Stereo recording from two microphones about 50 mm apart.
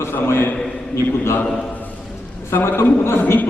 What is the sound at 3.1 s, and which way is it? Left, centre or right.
Speech, left.